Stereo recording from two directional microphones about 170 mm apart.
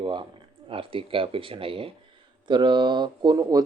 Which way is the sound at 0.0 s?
30° right (ahead or behind).